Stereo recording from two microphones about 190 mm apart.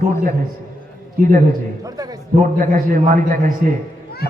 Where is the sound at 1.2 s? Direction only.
45° right (ahead or behind).